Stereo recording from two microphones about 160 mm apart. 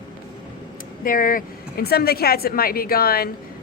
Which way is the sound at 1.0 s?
60° left (ahead or behind).